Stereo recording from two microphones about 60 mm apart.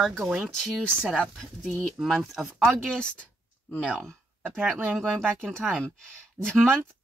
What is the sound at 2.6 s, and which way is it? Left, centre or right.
Speech, centre.